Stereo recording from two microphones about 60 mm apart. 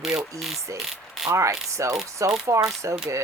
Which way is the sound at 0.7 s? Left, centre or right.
Centre.